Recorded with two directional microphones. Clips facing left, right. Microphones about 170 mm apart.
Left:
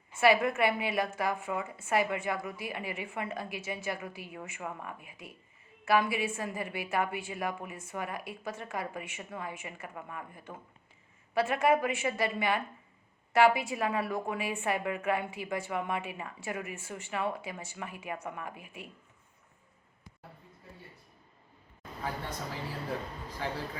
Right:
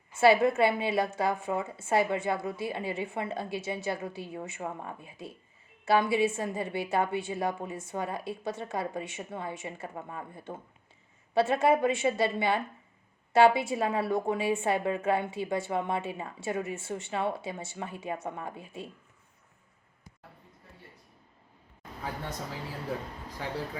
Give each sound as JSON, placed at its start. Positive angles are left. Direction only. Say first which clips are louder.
{"t": 0.2, "sound": "a woman's voice", "louder": "right 4 dB", "side_deg": -30}